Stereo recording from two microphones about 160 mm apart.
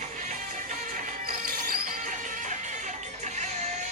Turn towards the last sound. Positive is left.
turn(degrees=-60)  # may be behind; listen again after turning